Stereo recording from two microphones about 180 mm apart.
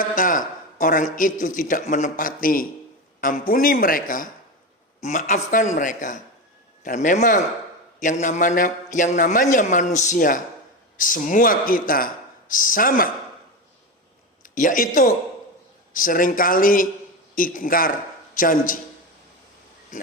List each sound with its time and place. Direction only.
0.0 s a man's voice: 50° left (ahead or behind)
14.4 s a man's voice: 45° left (ahead or behind)